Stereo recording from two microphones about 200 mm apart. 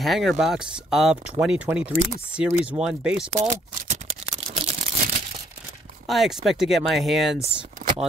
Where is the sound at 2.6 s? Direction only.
5° right (ahead or behind).